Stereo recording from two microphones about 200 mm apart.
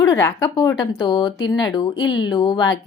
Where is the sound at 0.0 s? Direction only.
15° left (ahead or behind).